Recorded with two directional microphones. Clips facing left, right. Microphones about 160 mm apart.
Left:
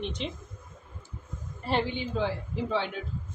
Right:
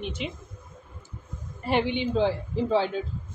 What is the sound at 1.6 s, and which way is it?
A woman's voice, 20° right (ahead or behind).